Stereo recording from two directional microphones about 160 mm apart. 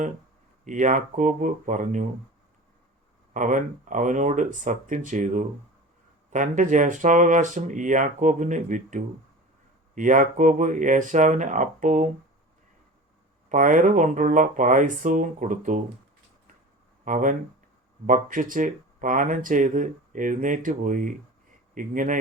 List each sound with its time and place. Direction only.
0.6 s speech: 50° right (ahead or behind)
3.3 s speech: 55° right (ahead or behind)
13.5 s speech: 55° right (ahead or behind)
17.1 s speech: 55° right (ahead or behind)